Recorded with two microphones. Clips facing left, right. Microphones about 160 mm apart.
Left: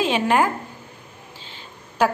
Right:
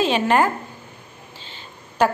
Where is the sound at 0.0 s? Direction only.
10° left (ahead or behind).